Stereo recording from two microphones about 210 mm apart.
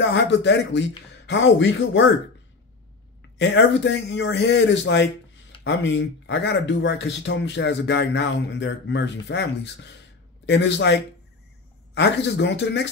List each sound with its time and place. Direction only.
0.1 s speech: 55° left (ahead or behind)
3.3 s speech: 60° left (ahead or behind)